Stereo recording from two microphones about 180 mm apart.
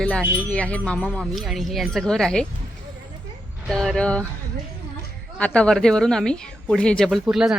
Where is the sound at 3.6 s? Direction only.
Centre (ahead or behind).